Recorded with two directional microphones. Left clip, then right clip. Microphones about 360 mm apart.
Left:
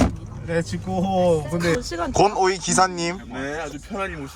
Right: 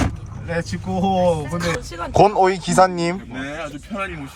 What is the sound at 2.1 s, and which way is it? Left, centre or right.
Speech, centre.